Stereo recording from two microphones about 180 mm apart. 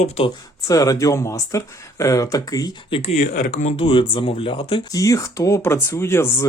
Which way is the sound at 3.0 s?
40° left (ahead or behind).